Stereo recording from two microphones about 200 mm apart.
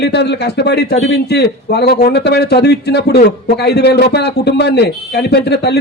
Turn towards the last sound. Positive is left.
turn(degrees=55)  # may be behind; listen again after turning